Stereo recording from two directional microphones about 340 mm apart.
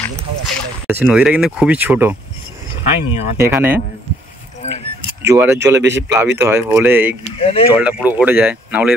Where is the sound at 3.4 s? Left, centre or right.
Centre.